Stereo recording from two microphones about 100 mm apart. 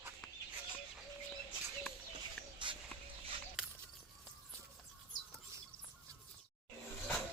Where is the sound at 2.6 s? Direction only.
55° right (ahead or behind).